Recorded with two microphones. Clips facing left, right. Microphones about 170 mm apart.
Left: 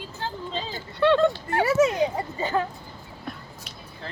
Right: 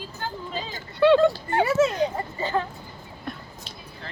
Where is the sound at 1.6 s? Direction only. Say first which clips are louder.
Left 1 dB; 10° left (ahead or behind).